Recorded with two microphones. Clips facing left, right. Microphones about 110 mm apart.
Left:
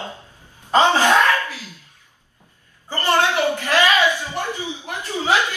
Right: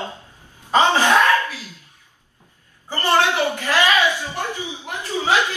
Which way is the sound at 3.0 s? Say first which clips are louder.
Even; 15° right (ahead or behind).